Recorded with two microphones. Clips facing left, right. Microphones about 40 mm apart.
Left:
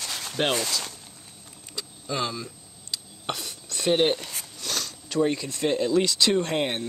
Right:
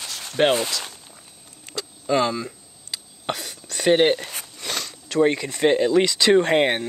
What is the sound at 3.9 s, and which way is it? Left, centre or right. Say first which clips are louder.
Speech: right 5 dB; right.